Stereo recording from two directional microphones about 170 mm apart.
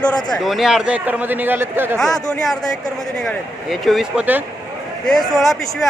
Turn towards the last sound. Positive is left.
turn(degrees=0)  # may be behind; listen again after turning